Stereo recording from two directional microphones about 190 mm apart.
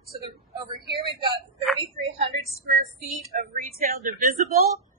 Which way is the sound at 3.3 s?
50° right (ahead or behind).